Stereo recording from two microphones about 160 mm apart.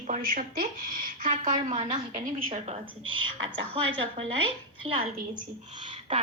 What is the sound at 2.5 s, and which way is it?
Speech, 35° right (ahead or behind).